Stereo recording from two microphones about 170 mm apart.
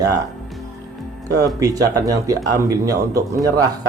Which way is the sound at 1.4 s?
20° right (ahead or behind).